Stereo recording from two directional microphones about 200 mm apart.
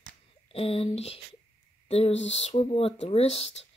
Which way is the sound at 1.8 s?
30° left (ahead or behind).